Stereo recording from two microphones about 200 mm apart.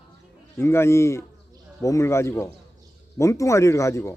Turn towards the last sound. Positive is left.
turn(degrees=15)  # may be behind; listen again after turning